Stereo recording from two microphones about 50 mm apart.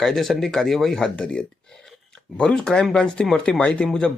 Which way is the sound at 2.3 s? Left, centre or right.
Centre.